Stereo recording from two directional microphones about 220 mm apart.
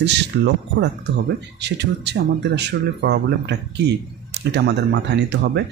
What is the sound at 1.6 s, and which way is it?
Speech, 50° right (ahead or behind).